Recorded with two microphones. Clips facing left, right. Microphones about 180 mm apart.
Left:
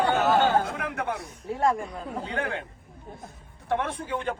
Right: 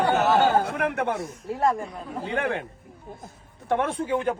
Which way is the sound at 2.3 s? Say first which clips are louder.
Right 5 dB; 60° right (ahead or behind).